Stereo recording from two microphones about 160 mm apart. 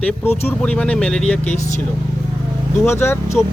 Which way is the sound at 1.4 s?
45° left (ahead or behind).